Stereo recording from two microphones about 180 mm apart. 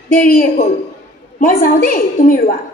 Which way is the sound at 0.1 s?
50° left (ahead or behind).